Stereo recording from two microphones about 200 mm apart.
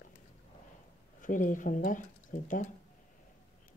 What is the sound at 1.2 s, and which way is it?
Speech, 40° left (ahead or behind).